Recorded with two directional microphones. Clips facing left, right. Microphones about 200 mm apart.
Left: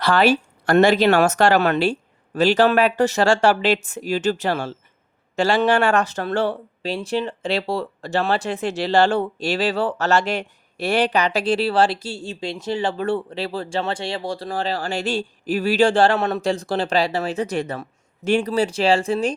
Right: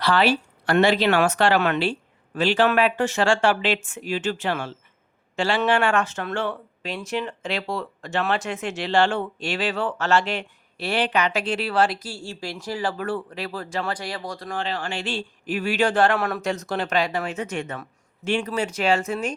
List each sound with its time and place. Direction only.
0.0 s speech: 45° left (ahead or behind); by 19.3 s 30° left (ahead or behind)